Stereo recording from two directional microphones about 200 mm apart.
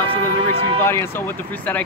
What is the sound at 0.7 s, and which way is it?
Speech, 10° left (ahead or behind).